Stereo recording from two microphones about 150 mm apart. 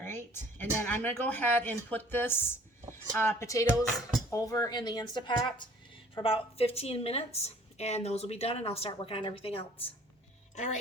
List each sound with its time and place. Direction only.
0.6 s speech: 15° left (ahead or behind); by 5.6 s 30° left (ahead or behind)
6.2 s speech: 40° left (ahead or behind)
10.5 s a woman's voice: 50° left (ahead or behind)